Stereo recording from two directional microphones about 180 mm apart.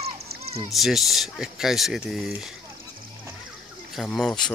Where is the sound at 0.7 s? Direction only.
Centre (ahead or behind).